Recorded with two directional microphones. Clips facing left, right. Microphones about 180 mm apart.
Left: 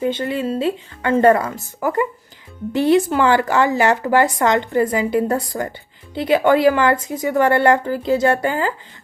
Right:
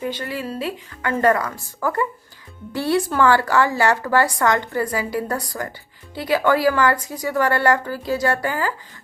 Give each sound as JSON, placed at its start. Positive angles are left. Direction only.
{"t": 0.0, "sound": "speech", "side_deg": 25}